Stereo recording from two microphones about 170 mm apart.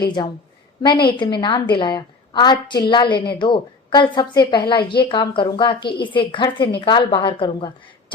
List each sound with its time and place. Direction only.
0.2 s a woman's voice: 25° left (ahead or behind)